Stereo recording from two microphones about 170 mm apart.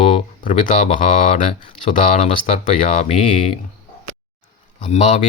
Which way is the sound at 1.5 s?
30° left (ahead or behind).